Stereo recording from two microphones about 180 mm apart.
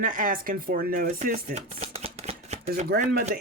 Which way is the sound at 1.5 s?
35° right (ahead or behind).